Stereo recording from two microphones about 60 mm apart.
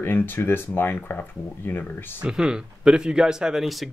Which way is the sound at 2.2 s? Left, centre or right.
Centre.